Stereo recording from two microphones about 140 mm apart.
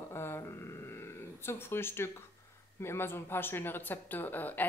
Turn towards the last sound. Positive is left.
turn(degrees=15)  # may be behind; listen again after turning